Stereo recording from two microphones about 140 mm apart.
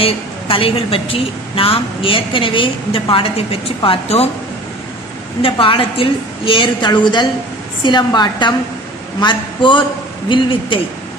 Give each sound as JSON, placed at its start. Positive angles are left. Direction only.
{"t": 0.0, "sound": "a woman's voice", "side_deg": 40}
{"t": 5.4, "sound": "a woman's voice", "side_deg": 40}